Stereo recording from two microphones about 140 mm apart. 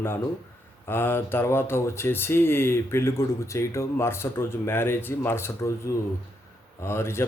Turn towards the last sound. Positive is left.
turn(degrees=20)  # may be behind; listen again after turning